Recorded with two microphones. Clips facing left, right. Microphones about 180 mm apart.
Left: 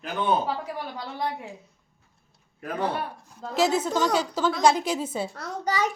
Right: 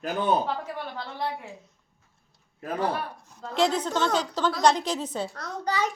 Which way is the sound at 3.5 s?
5° left (ahead or behind).